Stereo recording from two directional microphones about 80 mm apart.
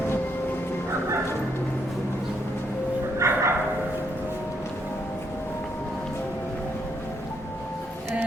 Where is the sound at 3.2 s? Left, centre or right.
Right.